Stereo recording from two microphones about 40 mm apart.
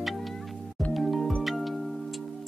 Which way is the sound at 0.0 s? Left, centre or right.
Centre.